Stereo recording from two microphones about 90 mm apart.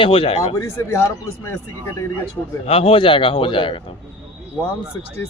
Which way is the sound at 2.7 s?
90° left.